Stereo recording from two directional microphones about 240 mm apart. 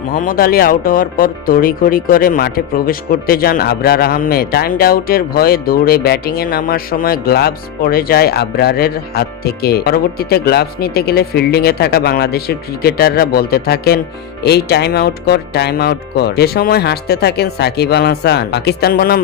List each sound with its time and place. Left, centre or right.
0.1 s speech: left